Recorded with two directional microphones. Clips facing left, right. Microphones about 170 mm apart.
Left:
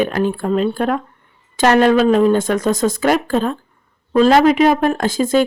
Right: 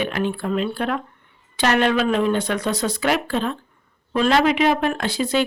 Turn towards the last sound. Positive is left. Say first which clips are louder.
# left 6 dB
turn(degrees=45)  # may be behind; listen again after turning